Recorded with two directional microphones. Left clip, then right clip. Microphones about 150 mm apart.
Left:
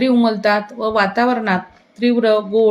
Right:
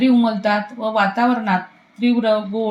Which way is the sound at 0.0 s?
55° left (ahead or behind).